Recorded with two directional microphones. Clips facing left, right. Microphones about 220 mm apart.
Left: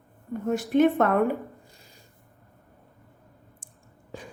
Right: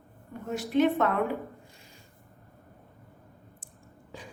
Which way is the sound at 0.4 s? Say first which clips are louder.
Left 4 dB; 50° left (ahead or behind).